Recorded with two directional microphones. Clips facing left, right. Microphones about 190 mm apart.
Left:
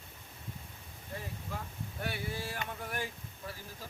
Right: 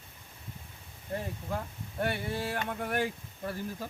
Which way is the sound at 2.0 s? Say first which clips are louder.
Right 7 dB; 55° right (ahead or behind).